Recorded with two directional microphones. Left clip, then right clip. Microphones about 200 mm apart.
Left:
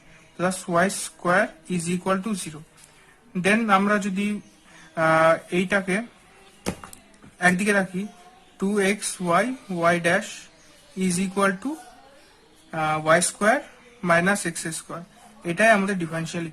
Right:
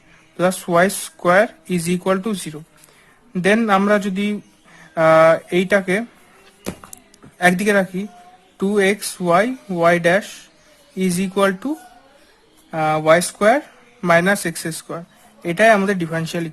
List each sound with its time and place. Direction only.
0.3 s speech: 35° right (ahead or behind)
7.3 s speech: 35° right (ahead or behind)
12.7 s speech: 30° right (ahead or behind)